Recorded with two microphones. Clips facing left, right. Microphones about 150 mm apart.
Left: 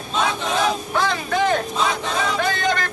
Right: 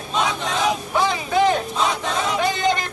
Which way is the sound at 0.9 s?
10° right (ahead or behind).